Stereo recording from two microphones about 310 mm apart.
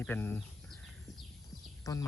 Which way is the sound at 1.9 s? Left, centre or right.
Centre.